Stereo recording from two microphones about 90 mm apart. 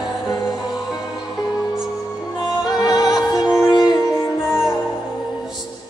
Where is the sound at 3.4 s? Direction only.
50° left (ahead or behind).